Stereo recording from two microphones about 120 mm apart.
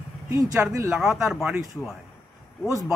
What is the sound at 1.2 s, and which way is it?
Speech, 5° right (ahead or behind).